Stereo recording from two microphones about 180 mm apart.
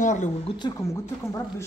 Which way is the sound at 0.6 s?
25° left (ahead or behind).